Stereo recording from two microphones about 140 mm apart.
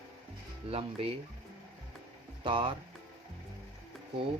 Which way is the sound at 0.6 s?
40° right (ahead or behind).